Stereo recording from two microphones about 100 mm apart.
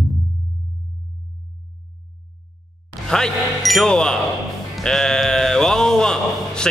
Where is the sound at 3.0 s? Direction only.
5° left (ahead or behind).